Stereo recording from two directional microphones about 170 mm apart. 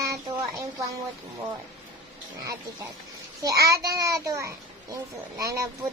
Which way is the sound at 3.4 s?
20° right (ahead or behind).